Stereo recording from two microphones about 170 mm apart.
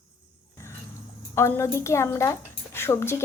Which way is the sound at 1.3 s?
15° left (ahead or behind).